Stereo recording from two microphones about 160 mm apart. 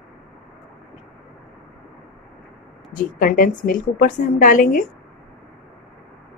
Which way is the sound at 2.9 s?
60° left (ahead or behind).